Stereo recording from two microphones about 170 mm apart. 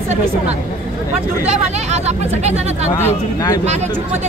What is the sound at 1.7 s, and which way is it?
Speech, 40° right (ahead or behind).